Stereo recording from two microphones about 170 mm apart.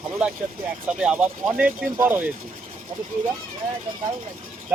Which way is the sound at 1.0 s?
5° right (ahead or behind).